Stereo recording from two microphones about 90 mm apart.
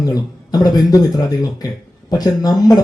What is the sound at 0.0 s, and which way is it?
A man's voice, 45° left (ahead or behind).